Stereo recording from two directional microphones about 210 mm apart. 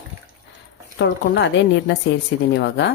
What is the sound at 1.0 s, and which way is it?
Speech, 60° left (ahead or behind).